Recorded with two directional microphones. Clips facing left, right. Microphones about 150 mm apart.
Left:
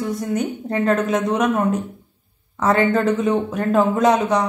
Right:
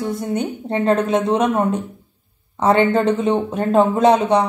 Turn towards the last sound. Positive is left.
turn(degrees=-25)  # may be behind; listen again after turning